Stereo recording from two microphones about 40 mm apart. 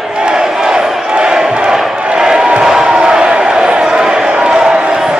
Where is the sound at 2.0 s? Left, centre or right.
Centre.